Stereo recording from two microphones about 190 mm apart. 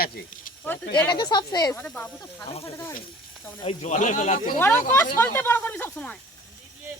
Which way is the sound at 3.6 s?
40° left (ahead or behind).